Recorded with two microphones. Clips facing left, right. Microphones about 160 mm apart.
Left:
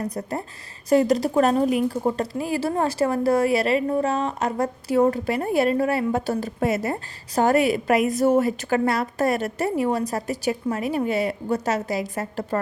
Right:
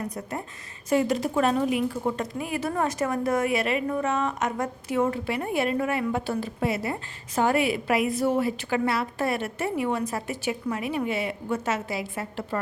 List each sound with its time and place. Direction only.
0.0 s speech: 35° left (ahead or behind)